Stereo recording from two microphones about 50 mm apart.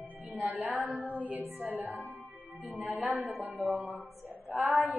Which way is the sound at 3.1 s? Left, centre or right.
Right.